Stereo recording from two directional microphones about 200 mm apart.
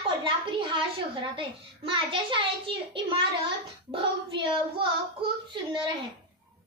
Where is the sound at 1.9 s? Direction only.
25° right (ahead or behind).